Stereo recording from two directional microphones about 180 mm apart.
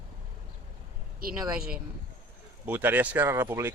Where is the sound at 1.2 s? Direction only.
55° right (ahead or behind).